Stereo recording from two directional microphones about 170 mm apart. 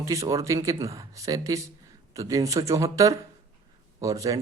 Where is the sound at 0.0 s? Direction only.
20° right (ahead or behind).